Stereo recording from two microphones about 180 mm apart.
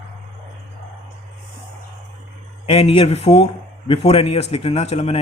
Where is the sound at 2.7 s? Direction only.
35° left (ahead or behind).